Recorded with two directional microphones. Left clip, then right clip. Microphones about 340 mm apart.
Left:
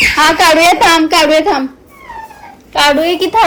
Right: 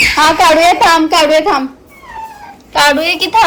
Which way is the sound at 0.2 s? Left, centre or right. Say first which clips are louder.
Even; right.